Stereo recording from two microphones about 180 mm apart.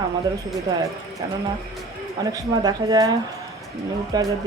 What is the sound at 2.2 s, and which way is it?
A man's voice, 20° right (ahead or behind).